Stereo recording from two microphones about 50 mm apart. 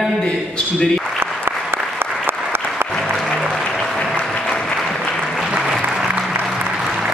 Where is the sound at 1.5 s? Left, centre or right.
Right.